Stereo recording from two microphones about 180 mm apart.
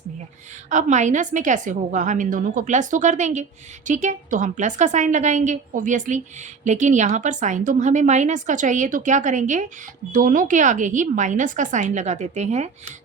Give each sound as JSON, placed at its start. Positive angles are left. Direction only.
{"t": 0.7, "sound": "a woman's voice", "side_deg": -40}